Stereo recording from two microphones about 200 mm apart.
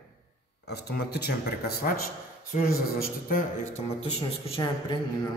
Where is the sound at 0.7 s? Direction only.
55° left (ahead or behind).